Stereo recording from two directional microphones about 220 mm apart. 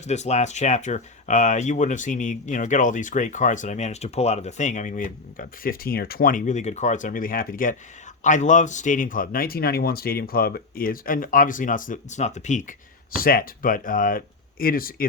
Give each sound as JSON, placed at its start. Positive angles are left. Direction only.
{"t": 0.0, "sound": "speech", "side_deg": 30}